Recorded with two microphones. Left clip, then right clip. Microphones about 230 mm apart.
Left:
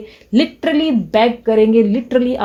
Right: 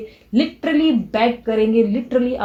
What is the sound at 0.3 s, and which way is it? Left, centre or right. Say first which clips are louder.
Speech: left 3 dB; left.